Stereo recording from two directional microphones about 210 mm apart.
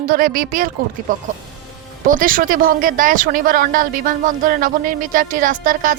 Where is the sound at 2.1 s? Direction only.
40° right (ahead or behind).